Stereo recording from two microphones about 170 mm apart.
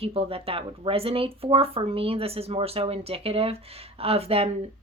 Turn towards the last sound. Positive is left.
turn(degrees=-35)  # may be behind; listen again after turning